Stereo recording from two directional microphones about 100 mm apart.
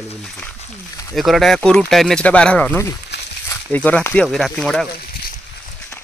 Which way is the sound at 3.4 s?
25° left (ahead or behind).